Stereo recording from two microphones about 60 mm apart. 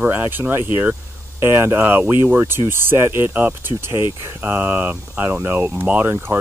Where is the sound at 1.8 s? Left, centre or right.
Right.